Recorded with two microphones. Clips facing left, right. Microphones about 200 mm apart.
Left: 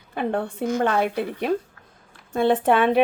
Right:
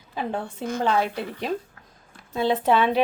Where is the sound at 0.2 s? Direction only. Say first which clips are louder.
Left 4 dB; 60° left (ahead or behind).